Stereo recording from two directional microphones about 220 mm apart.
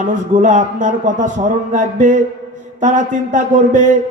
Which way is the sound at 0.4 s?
35° right (ahead or behind).